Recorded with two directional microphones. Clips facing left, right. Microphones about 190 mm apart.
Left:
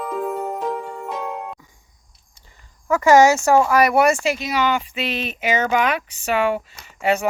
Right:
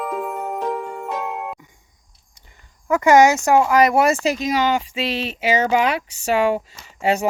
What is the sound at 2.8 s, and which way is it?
Speech, 20° right (ahead or behind).